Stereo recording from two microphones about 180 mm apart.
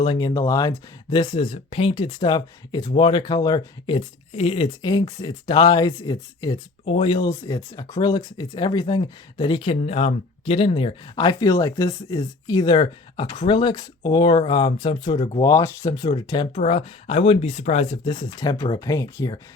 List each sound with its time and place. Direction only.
0.0 s speech: 25° left (ahead or behind)
7.3 s speech: 20° left (ahead or behind); by 15.4 s 35° left (ahead or behind)
15.4 s speech: 20° left (ahead or behind)